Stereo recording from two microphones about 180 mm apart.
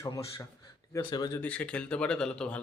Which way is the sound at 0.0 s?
15° left (ahead or behind).